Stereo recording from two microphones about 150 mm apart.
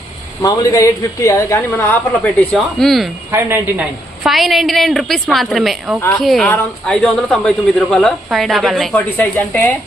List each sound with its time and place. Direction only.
0.4 s a woman's voice: 25° left (ahead or behind); by 3.1 s centre (ahead or behind)
3.3 s a woman's voice: 15° right (ahead or behind)
4.2 s a man's voice: centre (ahead or behind)